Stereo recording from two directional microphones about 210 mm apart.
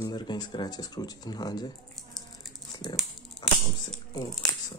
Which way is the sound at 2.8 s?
20° left (ahead or behind).